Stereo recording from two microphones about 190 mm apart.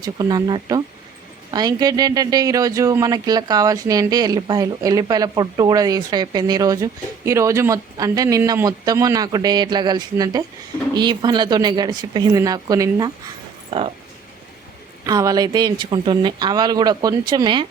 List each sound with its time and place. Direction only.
0.0 s speech: 20° right (ahead or behind)
13.7 s speech: 30° right (ahead or behind)
15.0 s speech: 20° right (ahead or behind)